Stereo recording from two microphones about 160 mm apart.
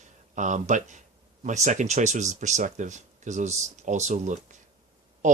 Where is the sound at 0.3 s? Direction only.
50° right (ahead or behind).